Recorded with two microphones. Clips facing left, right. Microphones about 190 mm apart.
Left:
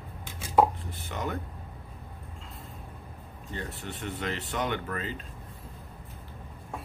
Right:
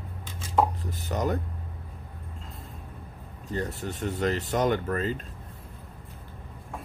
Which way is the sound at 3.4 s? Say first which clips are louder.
Right 6 dB; 40° right (ahead or behind).